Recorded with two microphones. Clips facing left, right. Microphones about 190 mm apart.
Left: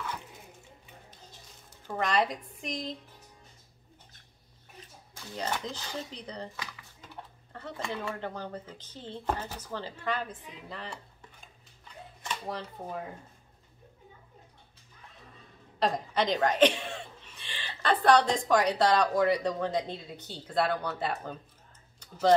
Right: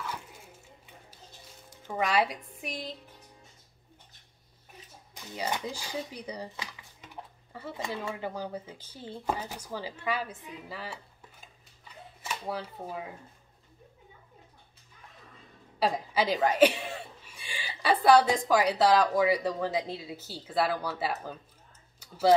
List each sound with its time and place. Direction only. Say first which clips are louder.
1.9 s speech: right 1 dB; 10° right (ahead or behind)
5.3 s speech: right 1 dB; 10° right (ahead or behind)
6.5 s dishes: even; 20° right (ahead or behind)
7.5 s dishes: right 1 dB; 10° right (ahead or behind)
8.1 s speech: right 2 dB; 10° right (ahead or behind)
12.2 s speech: right 1 dB; 5° right (ahead or behind)
15.8 s a woman's voice: even; 5° right (ahead or behind)
22.0 s tick-tock: right 1 dB; 5° right (ahead or behind)